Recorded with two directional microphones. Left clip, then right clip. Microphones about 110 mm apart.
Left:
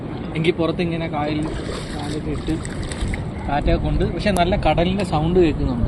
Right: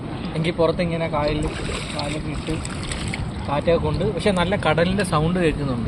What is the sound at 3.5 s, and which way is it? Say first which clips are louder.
Speech: right 2 dB; 50° right (ahead or behind).